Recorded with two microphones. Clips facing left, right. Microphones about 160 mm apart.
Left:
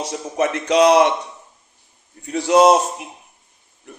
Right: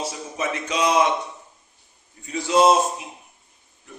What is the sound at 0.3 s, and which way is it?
Speech, 70° left (ahead or behind).